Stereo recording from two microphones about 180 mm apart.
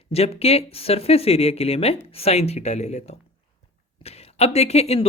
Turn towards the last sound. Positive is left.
turn(degrees=35)  # may be behind; listen again after turning